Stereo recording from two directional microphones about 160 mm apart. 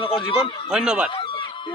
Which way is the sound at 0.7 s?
5° right (ahead or behind).